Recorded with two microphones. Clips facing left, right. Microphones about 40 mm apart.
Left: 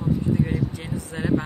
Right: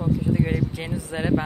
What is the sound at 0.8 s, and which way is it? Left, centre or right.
Speech, right.